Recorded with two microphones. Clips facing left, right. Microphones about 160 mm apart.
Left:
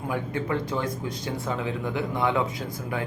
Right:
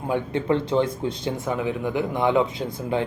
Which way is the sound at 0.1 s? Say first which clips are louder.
Right 6 dB; 25° right (ahead or behind).